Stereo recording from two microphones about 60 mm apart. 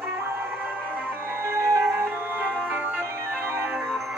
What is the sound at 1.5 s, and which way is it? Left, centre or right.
Music, right.